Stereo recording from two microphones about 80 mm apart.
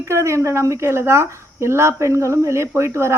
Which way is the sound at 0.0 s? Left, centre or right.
Right.